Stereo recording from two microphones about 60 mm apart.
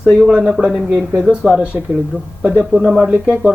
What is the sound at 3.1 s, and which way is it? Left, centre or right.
Speech, right.